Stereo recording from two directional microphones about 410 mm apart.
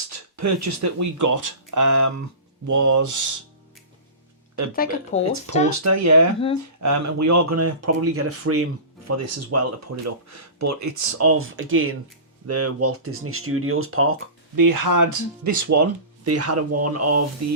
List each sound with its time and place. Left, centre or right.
0.1 s speech: right
5.1 s speech: centre
5.5 s speech: right
14.5 s speech: right